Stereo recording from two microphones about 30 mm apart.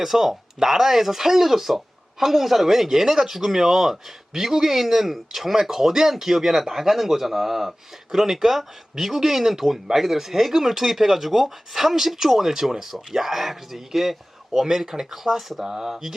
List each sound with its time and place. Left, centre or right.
0.0 s speech: centre